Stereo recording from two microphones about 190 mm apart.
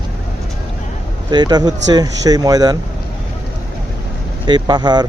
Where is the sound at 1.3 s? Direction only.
20° right (ahead or behind).